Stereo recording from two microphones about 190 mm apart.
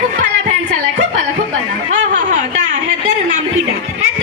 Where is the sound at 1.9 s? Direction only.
40° right (ahead or behind).